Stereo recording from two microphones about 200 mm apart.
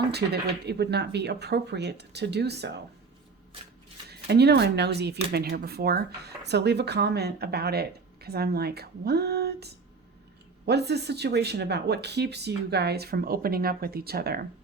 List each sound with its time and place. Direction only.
0.1 s speech: 55° right (ahead or behind)
4.1 s speech: 55° right (ahead or behind)